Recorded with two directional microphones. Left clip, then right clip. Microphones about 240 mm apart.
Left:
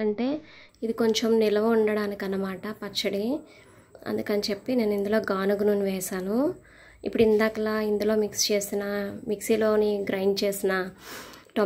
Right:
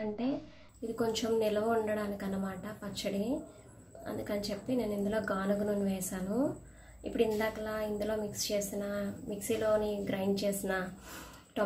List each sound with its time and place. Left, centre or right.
0.9 s a woman's voice: left